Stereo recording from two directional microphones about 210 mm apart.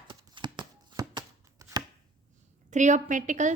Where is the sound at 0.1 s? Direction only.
20° right (ahead or behind).